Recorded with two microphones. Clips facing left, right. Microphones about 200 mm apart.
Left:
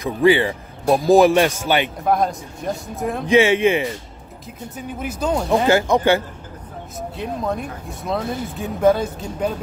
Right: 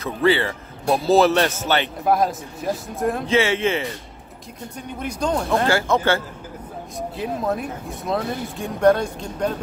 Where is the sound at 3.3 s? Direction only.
15° left (ahead or behind).